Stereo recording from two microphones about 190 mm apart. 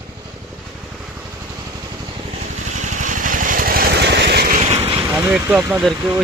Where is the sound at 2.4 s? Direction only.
40° right (ahead or behind).